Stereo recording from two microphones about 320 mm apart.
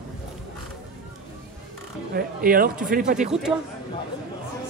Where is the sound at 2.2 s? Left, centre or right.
Right.